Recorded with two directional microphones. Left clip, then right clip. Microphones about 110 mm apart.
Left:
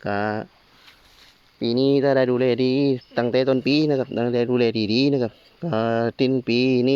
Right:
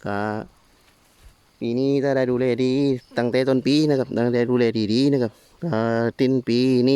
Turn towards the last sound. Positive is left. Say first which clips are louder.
# even
turn(degrees=-40)  # may be behind; listen again after turning